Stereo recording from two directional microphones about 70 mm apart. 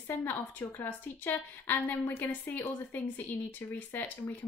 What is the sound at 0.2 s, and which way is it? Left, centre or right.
A woman's voice, left.